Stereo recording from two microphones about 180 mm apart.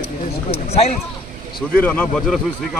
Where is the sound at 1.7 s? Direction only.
10° left (ahead or behind).